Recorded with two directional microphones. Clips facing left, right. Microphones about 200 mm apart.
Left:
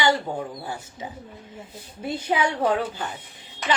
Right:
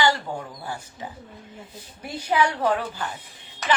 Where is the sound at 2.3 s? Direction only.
25° left (ahead or behind).